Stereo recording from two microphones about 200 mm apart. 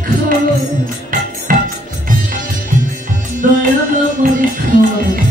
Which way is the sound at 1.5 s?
45° right (ahead or behind).